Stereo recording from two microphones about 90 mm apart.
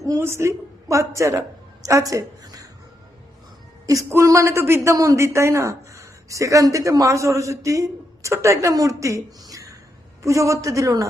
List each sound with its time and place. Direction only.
0.0 s a woman's voice: 35° right (ahead or behind)
3.8 s a woman's voice: 35° right (ahead or behind)